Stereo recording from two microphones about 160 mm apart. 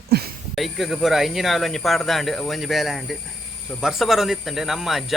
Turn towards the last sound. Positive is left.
turn(degrees=0)  # may be behind; listen again after turning